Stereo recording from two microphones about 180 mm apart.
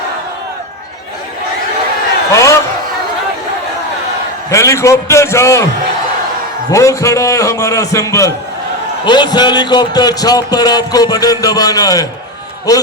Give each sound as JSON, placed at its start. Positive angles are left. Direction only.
{"t": 2.3, "sound": "a sound", "side_deg": 15}
{"t": 4.4, "sound": "a man's voice", "side_deg": 15}
{"t": 6.7, "sound": "a man's voice", "side_deg": 15}